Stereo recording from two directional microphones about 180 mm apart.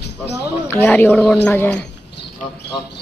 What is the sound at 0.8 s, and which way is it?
Speech, 10° left (ahead or behind).